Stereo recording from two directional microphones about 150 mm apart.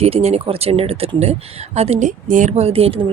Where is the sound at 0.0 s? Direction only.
45° right (ahead or behind).